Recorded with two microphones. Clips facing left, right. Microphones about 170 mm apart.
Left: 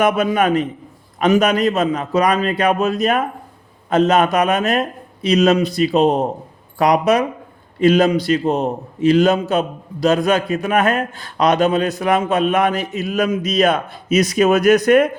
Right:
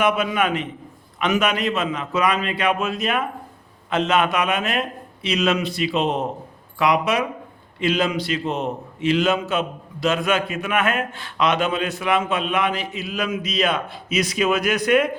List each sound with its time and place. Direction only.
0.0 s a man's voice: 40° left (ahead or behind)